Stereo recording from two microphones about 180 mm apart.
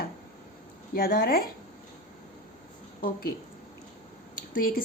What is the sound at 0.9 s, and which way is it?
Speech, 55° left (ahead or behind).